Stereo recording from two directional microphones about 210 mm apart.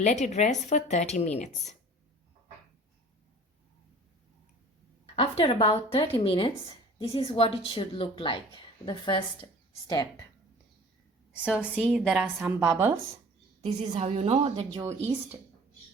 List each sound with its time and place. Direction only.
0.0 s a woman's voice: 35° left (ahead or behind)
5.1 s a woman's voice: 25° left (ahead or behind)
11.3 s a woman's voice: 5° right (ahead or behind)
13.7 s a woman's voice: 30° right (ahead or behind)
14.7 s a woman's voice: 20° right (ahead or behind)